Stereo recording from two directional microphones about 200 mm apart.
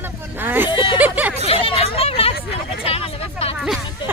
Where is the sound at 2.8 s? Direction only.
30° left (ahead or behind).